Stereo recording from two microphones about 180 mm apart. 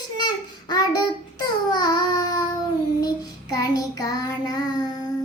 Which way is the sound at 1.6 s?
20° left (ahead or behind).